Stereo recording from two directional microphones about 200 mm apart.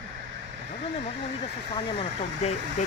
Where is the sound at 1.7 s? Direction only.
30° left (ahead or behind).